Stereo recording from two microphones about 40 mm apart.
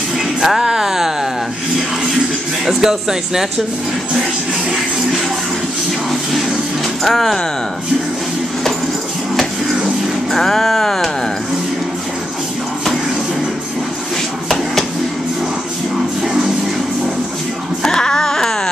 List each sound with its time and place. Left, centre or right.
0.4 s music: centre
2.6 s speech: centre
7.0 s speech: centre
10.3 s music: centre
17.8 s a sound: centre